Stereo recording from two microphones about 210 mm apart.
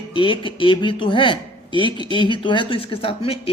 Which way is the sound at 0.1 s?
25° left (ahead or behind).